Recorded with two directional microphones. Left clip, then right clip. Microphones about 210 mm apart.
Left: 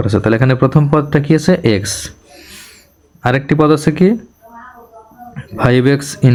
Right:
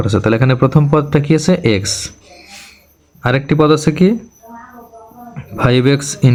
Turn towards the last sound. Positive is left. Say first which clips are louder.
# left 1 dB
turn(degrees=5)  # may be behind; listen again after turning